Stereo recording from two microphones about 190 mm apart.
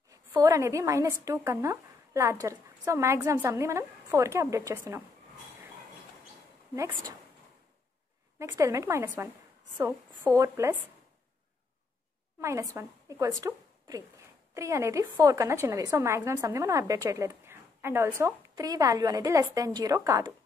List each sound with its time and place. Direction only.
0.3 s a woman's voice: 15° right (ahead or behind)
8.4 s a woman's voice: 15° right (ahead or behind)
12.4 s a woman's voice: 15° right (ahead or behind)